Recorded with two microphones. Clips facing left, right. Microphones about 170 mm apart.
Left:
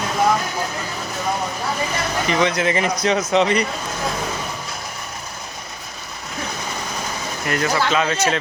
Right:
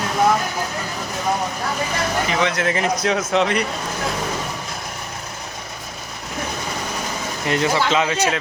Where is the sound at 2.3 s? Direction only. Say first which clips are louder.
Left 5 dB; centre (ahead or behind).